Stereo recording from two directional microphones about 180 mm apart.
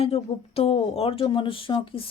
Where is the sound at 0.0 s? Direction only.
35° left (ahead or behind).